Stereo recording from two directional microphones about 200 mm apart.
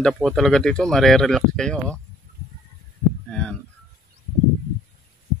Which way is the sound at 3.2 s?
5° left (ahead or behind).